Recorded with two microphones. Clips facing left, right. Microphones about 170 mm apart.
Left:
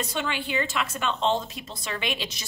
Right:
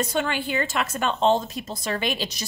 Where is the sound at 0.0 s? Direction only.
45° right (ahead or behind).